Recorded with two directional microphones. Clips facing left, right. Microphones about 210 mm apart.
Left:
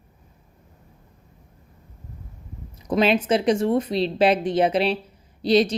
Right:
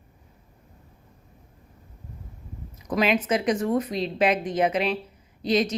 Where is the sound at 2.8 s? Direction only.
30° left (ahead or behind).